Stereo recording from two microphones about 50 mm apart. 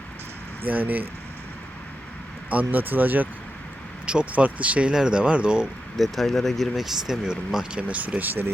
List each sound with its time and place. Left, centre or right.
0.7 s speech: right
2.5 s speech: right
4.0 s speech: right
6.0 s speech: centre
7.3 s speech: centre; by 8.4 s right